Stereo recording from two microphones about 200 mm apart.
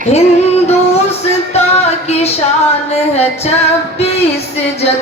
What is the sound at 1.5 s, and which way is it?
Music, 30° left (ahead or behind).